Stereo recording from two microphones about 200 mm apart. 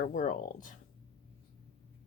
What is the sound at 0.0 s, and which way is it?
Speech, 40° left (ahead or behind).